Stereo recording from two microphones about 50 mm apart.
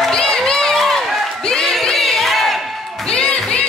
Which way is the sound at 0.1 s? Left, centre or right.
Centre.